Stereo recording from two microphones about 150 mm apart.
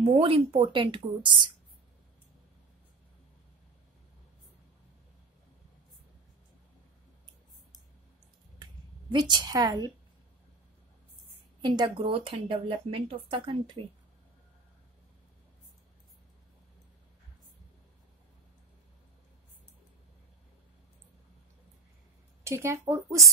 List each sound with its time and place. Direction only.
0.0 s speech: 40° right (ahead or behind)
9.1 s a woman's voice: 30° right (ahead or behind)
11.6 s speech: 30° right (ahead or behind)
22.4 s a woman's voice: 20° right (ahead or behind)